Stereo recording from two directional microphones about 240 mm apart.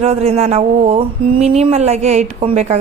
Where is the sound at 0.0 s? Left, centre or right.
Right.